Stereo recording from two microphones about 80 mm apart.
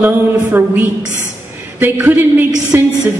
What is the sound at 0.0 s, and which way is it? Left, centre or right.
Speech, right.